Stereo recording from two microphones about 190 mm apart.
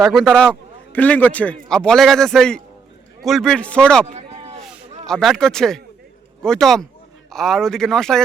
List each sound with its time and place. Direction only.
0.0 s a man's voice: centre (ahead or behind)
4.0 s a sound: 35° right (ahead or behind)
5.0 s a man's voice: centre (ahead or behind)